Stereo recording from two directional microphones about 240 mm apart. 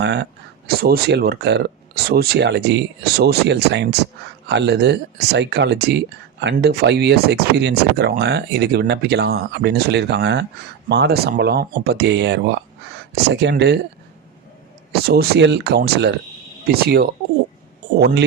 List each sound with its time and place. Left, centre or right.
0.0 s speech: right
14.9 s speech: right